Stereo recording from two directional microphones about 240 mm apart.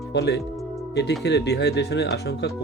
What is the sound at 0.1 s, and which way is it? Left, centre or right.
Speech, left.